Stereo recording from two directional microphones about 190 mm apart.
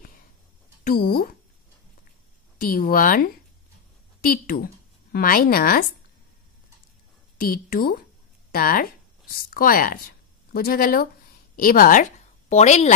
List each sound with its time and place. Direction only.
0.8 s a woman's voice: 50° left (ahead or behind)
2.6 s a woman's voice: 50° left (ahead or behind)
4.3 s a woman's voice: 50° left (ahead or behind)
7.3 s a woman's voice: 50° left (ahead or behind)